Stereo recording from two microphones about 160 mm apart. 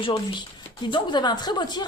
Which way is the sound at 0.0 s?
35° left (ahead or behind).